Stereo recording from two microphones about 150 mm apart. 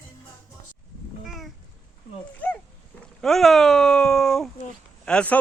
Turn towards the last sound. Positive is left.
turn(degrees=10)  # may be behind; listen again after turning